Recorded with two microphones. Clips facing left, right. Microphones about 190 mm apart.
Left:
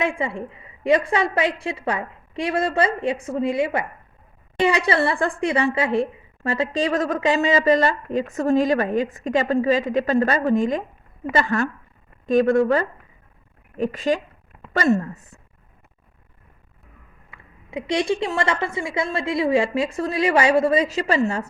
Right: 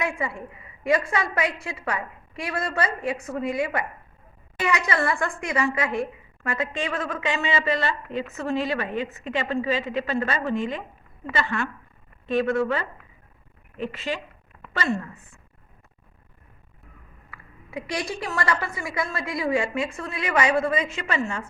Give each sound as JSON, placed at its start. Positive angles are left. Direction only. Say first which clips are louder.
{"t": 0.0, "sound": "a woman's voice", "louder": "left 4 dB", "side_deg": 30}
{"t": 17.3, "sound": "a woman's voice", "louder": "left 4 dB", "side_deg": 25}